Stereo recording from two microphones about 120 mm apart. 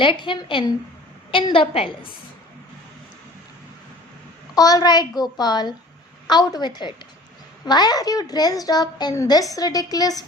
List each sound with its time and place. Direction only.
0.0 s a woman's voice: 45° left (ahead or behind)
4.5 s a woman's voice: 30° left (ahead or behind)